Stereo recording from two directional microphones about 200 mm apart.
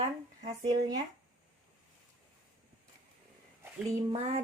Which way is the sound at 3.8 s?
25° right (ahead or behind).